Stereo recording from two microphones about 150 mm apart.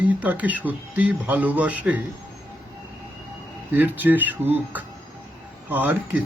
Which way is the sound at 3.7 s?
10° right (ahead or behind).